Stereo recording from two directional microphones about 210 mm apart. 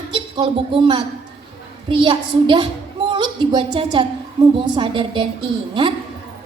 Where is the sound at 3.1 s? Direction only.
20° right (ahead or behind).